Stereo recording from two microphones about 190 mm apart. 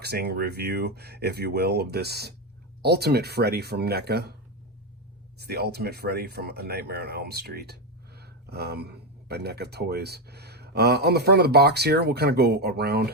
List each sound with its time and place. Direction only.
0.0 s speech: 55° right (ahead or behind)
5.4 s speech: 55° right (ahead or behind)